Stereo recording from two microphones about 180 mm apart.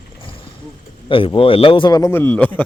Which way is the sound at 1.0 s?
30° left (ahead or behind).